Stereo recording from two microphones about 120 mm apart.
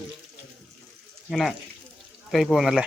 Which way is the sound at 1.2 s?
Centre (ahead or behind).